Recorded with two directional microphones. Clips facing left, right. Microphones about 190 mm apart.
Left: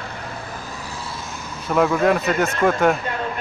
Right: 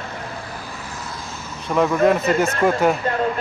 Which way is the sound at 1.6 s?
Centre (ahead or behind).